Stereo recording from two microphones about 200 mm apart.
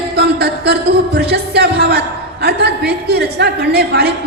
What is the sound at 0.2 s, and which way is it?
A woman's voice, 55° right (ahead or behind).